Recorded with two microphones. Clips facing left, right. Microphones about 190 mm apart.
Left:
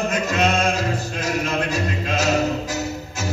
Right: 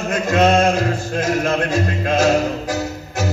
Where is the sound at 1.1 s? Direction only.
55° right (ahead or behind).